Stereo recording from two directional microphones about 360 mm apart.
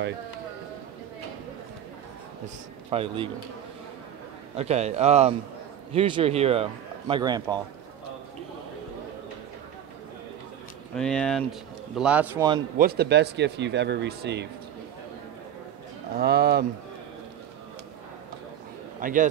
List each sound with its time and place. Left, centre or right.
2.9 s a man's voice: centre
4.6 s a man's voice: centre
11.0 s a man's voice: centre
12.7 s speech: right
16.2 s speech: right
18.9 s a man's voice: right